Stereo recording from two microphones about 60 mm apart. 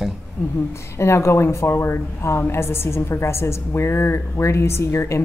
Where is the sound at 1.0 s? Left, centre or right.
Left.